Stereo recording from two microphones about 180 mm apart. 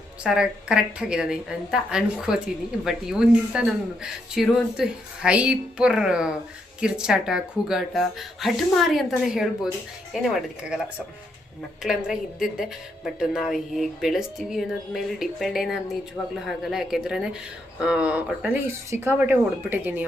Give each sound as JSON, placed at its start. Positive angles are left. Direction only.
{"t": 0.2, "sound": "speech", "side_deg": -5}
{"t": 11.8, "sound": "speech", "side_deg": -5}